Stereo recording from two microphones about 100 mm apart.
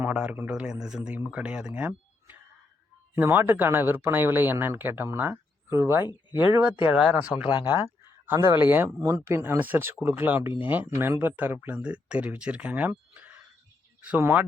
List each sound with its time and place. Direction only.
0.0 s speech: 15° right (ahead or behind)
8.5 s speech: 20° right (ahead or behind)
9.0 s speech: 30° right (ahead or behind)